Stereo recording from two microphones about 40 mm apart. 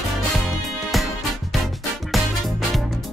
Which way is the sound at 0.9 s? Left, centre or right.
Centre.